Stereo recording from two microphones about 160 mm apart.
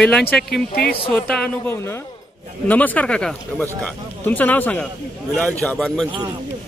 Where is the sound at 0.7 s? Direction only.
75° left (ahead or behind).